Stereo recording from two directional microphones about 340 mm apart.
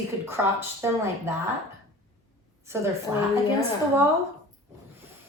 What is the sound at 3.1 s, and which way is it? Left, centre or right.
Speech, centre.